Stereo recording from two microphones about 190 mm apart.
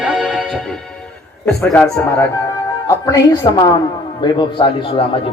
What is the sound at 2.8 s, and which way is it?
A woman's voice, 20° left (ahead or behind).